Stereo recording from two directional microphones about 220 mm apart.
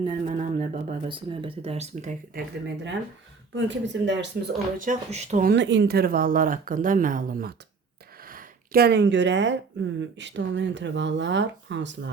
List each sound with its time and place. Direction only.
0.0 s a sound: 30° right (ahead or behind)
1.0 s speech: 25° right (ahead or behind)
3.5 s speech: 55° right (ahead or behind)
4.8 s speech: 30° right (ahead or behind)
5.5 s speech: 55° right (ahead or behind)